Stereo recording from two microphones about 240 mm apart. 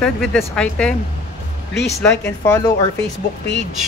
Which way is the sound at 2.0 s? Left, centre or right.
Centre.